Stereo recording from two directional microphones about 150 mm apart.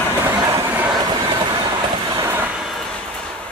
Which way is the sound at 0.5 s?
10° right (ahead or behind).